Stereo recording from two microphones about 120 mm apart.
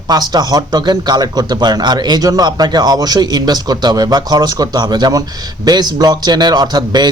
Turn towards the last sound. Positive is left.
turn(degrees=-35)  # may be behind; listen again after turning